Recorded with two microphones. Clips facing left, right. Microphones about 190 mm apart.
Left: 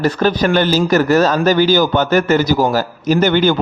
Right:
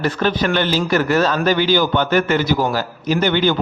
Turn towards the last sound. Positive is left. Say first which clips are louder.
# left 4 dB
turn(degrees=45)  # may be behind; listen again after turning